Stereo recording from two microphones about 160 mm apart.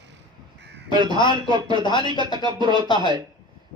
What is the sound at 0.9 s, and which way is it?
Speech, 30° right (ahead or behind).